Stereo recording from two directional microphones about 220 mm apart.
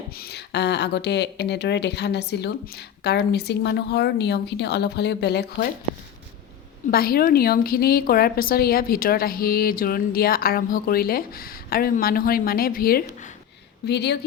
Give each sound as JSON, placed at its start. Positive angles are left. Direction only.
{"t": 0.1, "sound": "speech", "side_deg": 45}
{"t": 6.9, "sound": "a woman's voice", "side_deg": 45}